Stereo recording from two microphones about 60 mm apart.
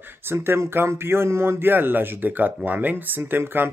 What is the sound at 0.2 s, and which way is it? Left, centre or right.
Speech, right.